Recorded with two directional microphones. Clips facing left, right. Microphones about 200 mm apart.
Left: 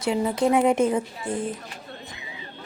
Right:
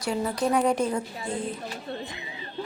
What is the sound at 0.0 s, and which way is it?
A woman's voice, 20° left (ahead or behind).